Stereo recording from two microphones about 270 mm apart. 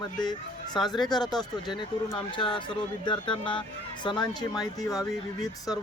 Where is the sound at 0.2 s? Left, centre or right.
Centre.